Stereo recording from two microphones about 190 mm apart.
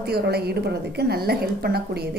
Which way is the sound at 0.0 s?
55° right (ahead or behind).